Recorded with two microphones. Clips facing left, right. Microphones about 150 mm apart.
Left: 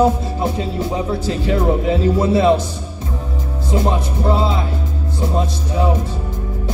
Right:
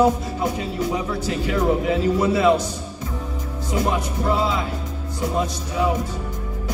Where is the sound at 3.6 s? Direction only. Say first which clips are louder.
Left 3 dB; 30° left (ahead or behind).